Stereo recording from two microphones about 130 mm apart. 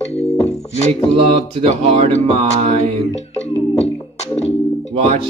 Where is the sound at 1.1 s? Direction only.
50° right (ahead or behind).